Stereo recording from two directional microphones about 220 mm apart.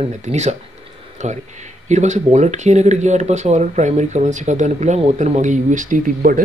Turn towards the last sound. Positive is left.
turn(degrees=-35)  # may be behind; listen again after turning